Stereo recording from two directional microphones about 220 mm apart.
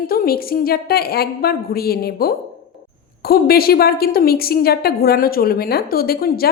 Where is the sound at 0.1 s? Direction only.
40° left (ahead or behind).